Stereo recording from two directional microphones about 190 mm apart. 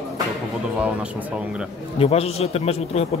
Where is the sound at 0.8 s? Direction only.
5° right (ahead or behind).